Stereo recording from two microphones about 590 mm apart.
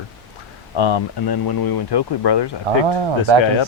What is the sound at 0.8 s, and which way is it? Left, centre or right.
Speech, left.